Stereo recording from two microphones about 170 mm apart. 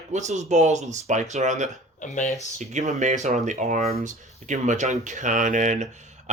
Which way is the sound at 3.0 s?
45° right (ahead or behind).